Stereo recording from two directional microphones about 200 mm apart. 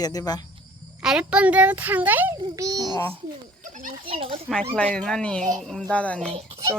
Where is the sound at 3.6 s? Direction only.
40° right (ahead or behind).